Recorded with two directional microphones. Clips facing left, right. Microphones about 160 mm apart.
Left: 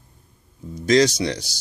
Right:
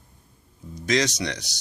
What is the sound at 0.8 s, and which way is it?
Speech, 30° left (ahead or behind).